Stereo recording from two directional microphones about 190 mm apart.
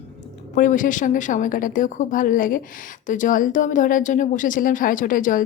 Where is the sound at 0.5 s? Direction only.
45° left (ahead or behind).